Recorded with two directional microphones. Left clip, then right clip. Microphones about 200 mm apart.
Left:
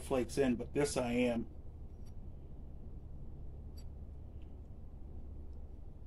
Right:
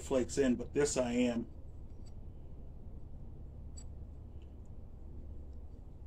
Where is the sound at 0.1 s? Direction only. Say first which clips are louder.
Right 2 dB; 15° left (ahead or behind).